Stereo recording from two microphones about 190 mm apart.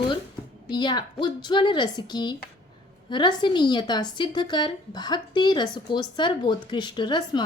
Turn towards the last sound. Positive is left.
turn(degrees=20)  # may be behind; listen again after turning